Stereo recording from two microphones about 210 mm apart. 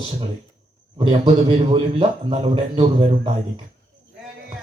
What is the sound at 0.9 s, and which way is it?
A man's voice, 25° right (ahead or behind).